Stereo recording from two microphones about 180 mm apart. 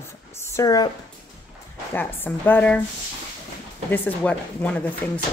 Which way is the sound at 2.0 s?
10° left (ahead or behind).